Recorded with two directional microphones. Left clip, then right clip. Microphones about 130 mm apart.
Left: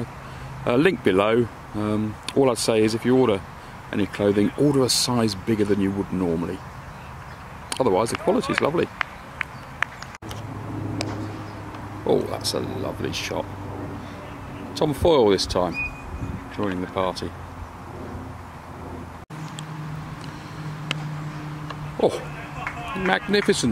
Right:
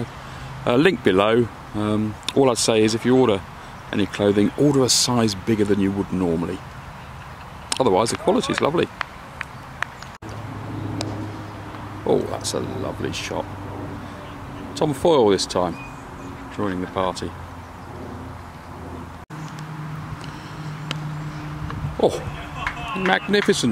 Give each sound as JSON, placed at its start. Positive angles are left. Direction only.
{"t": 0.7, "sound": "speech", "side_deg": -10}
{"t": 7.7, "sound": "a sound", "side_deg": -10}
{"t": 12.1, "sound": "speech", "side_deg": 0}
{"t": 14.7, "sound": "speech", "side_deg": -5}
{"t": 20.9, "sound": "a sound", "side_deg": 0}
{"t": 22.6, "sound": "run", "side_deg": -40}
{"t": 23.0, "sound": "speech", "side_deg": -5}